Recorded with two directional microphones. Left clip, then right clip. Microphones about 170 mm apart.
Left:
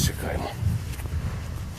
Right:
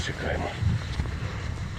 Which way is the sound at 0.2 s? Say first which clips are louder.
Right 1 dB; 20° left (ahead or behind).